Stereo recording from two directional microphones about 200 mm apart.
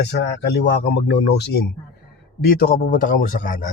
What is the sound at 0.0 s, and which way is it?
A man's voice, 60° left (ahead or behind).